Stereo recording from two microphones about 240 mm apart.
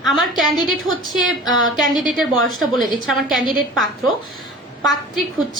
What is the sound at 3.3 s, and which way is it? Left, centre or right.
Speech, right.